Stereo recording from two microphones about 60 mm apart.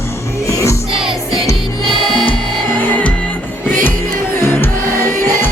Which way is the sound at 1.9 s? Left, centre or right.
Centre.